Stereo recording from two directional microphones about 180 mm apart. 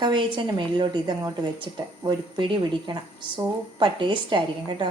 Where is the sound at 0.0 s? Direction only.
25° right (ahead or behind).